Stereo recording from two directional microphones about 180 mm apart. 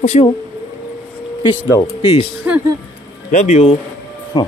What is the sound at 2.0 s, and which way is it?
Speech, 30° left (ahead or behind).